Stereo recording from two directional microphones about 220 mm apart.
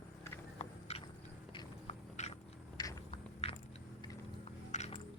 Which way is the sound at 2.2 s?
30° left (ahead or behind).